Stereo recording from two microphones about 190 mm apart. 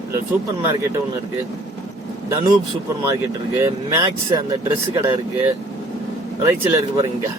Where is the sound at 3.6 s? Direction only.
20° right (ahead or behind).